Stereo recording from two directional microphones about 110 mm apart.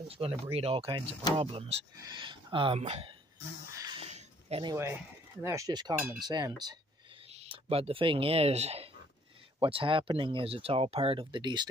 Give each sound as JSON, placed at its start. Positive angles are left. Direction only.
{"t": 0.1, "sound": "speech", "side_deg": -60}
{"t": 2.0, "sound": "speech", "side_deg": -50}
{"t": 2.8, "sound": "speech", "side_deg": -65}
{"t": 3.7, "sound": "a sound", "side_deg": -35}
{"t": 4.0, "sound": "a sound", "side_deg": -65}
{"t": 4.7, "sound": "speech", "side_deg": -25}
{"t": 5.7, "sound": "speech", "side_deg": -40}
{"t": 7.3, "sound": "speech", "side_deg": -65}
{"t": 9.6, "sound": "speech", "side_deg": -55}